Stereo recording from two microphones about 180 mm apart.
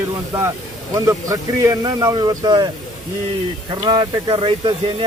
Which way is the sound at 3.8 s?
25° right (ahead or behind).